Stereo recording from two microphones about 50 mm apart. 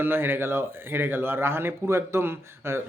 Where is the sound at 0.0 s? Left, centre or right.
Right.